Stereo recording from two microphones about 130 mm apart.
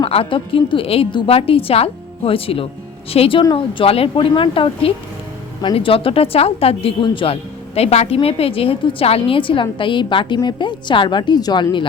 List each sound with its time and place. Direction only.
0.0 s a woman's voice: 45° left (ahead or behind)
7.8 s a woman's voice: 55° left (ahead or behind); by 11.9 s 35° left (ahead or behind)